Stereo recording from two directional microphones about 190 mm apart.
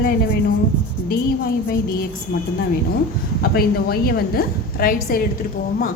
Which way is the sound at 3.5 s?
55° left (ahead or behind).